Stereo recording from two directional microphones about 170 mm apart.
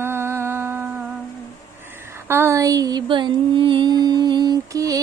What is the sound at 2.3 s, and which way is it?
Music, 15° right (ahead or behind).